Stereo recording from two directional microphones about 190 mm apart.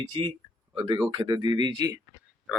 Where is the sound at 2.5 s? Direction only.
5° right (ahead or behind).